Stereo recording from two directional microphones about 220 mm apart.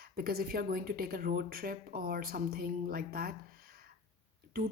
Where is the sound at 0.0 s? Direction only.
45° right (ahead or behind).